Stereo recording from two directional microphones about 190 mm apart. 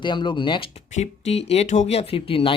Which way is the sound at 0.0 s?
25° left (ahead or behind).